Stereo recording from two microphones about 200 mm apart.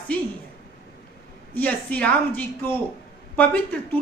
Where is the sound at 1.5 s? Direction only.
10° left (ahead or behind).